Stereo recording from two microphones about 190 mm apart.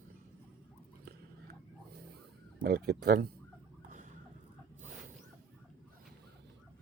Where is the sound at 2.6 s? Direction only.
55° right (ahead or behind).